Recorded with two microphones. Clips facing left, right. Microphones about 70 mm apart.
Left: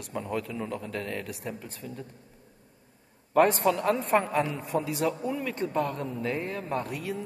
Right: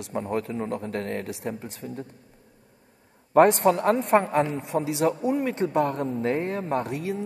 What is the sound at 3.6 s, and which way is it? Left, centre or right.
A man's voice, right.